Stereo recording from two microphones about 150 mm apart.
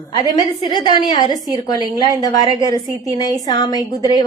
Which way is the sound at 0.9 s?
30° left (ahead or behind).